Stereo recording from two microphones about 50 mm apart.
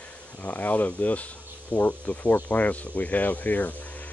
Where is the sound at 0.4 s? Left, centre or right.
Left.